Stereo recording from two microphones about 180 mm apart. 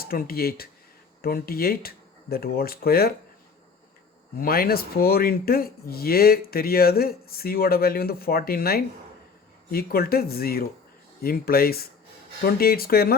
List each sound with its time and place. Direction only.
0.0 s speech: 55° left (ahead or behind)
4.4 s speech: 55° left (ahead or behind)